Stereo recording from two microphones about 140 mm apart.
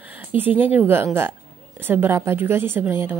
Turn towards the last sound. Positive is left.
turn(degrees=-15)  # may be behind; listen again after turning